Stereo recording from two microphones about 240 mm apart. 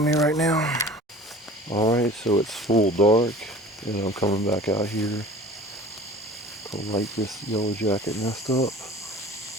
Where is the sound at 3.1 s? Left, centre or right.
Centre.